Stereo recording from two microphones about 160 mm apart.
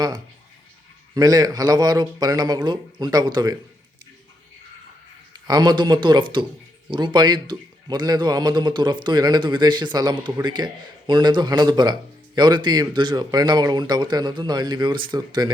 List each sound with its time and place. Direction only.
1.1 s speech: 25° right (ahead or behind)
5.3 s speech: 25° right (ahead or behind)